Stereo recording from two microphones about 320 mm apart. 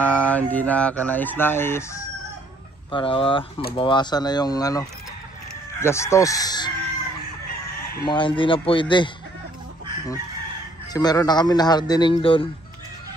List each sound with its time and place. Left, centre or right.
0.0 s speech: centre
8.1 s speech: centre
10.9 s speech: centre